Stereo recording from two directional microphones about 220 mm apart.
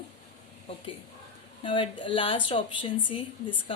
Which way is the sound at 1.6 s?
25° left (ahead or behind).